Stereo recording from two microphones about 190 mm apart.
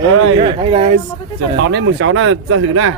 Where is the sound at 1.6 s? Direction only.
65° right (ahead or behind); by 2.9 s 90° right.